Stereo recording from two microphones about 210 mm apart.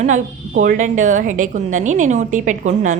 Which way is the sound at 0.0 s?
35° right (ahead or behind).